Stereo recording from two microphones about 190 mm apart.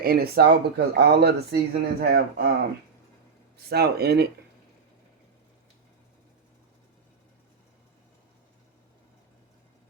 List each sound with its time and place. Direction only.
0.0 s speech: 55° right (ahead or behind)
3.7 s speech: 60° right (ahead or behind)